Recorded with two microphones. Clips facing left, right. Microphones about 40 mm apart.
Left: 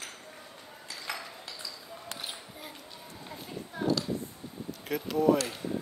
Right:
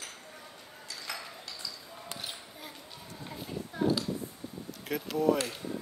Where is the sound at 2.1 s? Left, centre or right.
Centre.